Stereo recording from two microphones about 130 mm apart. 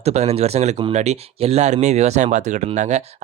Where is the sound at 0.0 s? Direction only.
55° right (ahead or behind).